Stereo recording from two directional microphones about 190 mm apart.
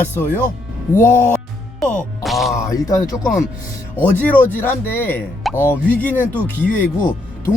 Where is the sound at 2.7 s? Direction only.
20° left (ahead or behind).